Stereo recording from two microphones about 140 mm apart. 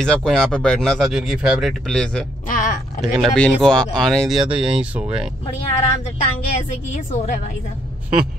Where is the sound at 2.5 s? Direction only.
70° left (ahead or behind).